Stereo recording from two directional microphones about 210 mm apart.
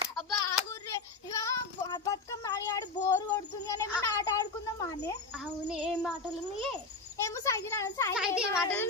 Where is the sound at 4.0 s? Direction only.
15° left (ahead or behind).